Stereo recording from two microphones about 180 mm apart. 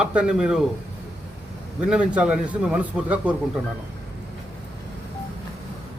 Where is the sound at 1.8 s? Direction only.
5° right (ahead or behind).